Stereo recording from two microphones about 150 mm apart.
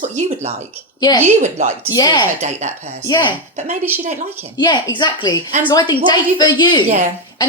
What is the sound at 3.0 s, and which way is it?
Speech, 30° left (ahead or behind).